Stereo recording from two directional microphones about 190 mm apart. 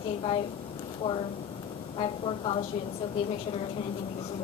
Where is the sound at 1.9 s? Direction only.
25° left (ahead or behind).